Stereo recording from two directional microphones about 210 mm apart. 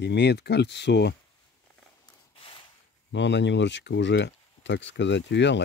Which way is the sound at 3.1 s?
55° left (ahead or behind).